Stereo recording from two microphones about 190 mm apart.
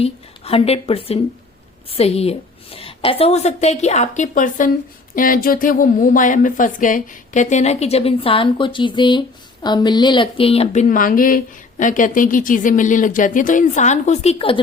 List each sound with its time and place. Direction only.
0.0 s a woman's voice: 30° left (ahead or behind)